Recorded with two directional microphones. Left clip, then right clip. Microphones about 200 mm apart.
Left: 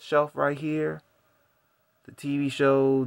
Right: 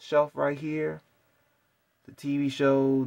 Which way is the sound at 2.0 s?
5° left (ahead or behind).